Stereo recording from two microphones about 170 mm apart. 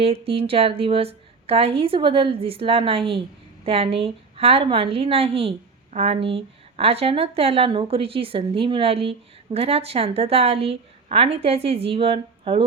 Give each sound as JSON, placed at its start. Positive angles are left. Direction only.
{"t": 0.0, "sound": "a woman's voice", "side_deg": -35}